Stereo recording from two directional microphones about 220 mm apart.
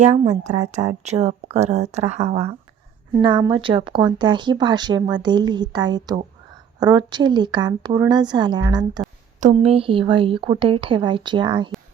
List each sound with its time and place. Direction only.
0.0 s speech: 30° right (ahead or behind)